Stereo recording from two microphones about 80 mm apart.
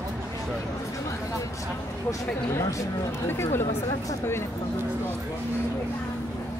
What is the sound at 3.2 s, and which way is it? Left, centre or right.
Speech, left.